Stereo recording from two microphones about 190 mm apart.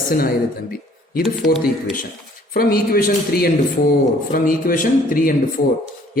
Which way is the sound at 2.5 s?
50° left (ahead or behind).